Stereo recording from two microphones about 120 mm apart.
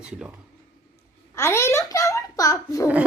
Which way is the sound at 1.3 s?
20° left (ahead or behind).